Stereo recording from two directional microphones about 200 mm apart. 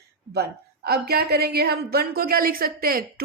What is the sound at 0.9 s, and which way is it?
A woman's voice, 50° right (ahead or behind).